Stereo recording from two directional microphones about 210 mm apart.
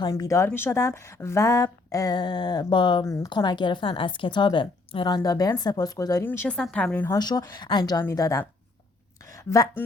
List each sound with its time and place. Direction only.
0.0 s a woman's voice: 15° left (ahead or behind)
7.2 s a woman's voice: 20° left (ahead or behind)